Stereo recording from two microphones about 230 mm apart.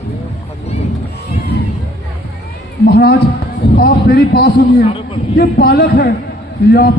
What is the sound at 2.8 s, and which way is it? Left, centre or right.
A man's voice, left.